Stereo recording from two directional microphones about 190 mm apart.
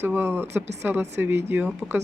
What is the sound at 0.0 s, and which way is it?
Speech, 10° right (ahead or behind).